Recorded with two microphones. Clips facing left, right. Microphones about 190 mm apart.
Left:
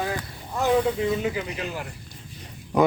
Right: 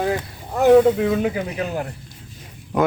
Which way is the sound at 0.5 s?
60° right (ahead or behind).